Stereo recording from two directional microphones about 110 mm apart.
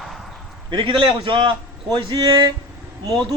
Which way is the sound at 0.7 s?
45° right (ahead or behind).